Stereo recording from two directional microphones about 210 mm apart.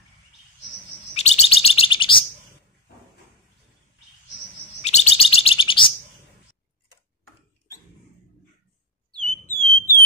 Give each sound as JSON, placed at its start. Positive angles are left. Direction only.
{"t": 1.1, "sound": "bird", "side_deg": 30}
{"t": 4.8, "sound": "bird", "side_deg": 30}
{"t": 9.5, "sound": "alarm", "side_deg": 10}